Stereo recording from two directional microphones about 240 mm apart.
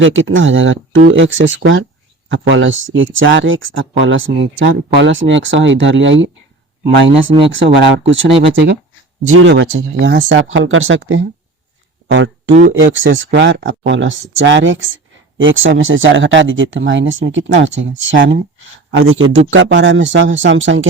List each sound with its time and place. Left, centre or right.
0.0 s speech: right
7.5 s speech: right
12.8 s speech: right